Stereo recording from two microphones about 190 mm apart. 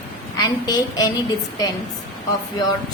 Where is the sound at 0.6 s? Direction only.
20° left (ahead or behind).